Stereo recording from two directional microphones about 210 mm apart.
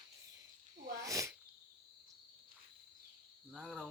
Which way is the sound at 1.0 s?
15° right (ahead or behind).